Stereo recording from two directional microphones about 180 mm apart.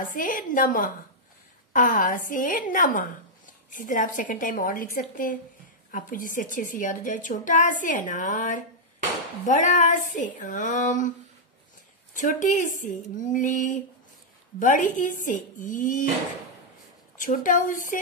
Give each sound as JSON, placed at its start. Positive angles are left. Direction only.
{"t": 0.0, "sound": "a woman's voice", "side_deg": 45}
{"t": 17.2, "sound": "a woman's voice", "side_deg": 50}